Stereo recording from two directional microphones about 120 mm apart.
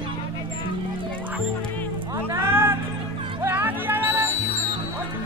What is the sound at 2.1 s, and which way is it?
Music, 20° right (ahead or behind).